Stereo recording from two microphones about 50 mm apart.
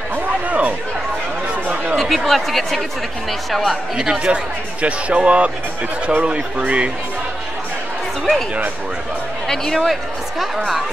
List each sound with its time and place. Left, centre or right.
0.1 s a sound: right
2.0 s speech: centre
3.9 s speech: centre
9.5 s speech: centre